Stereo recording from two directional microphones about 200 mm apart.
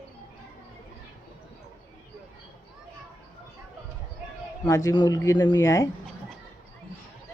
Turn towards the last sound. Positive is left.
turn(degrees=15)  # may be behind; listen again after turning